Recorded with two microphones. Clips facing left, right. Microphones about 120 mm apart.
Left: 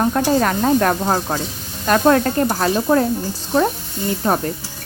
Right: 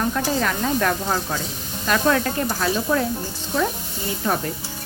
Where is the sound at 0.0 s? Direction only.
40° left (ahead or behind).